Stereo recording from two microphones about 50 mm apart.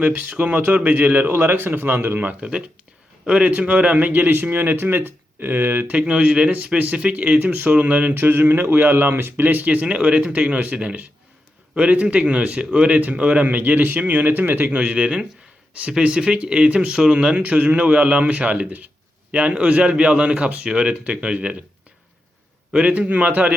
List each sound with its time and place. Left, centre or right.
0.0 s a man's voice: right
2.4 s a man's voice: right
5.9 s a man's voice: right
22.7 s a man's voice: right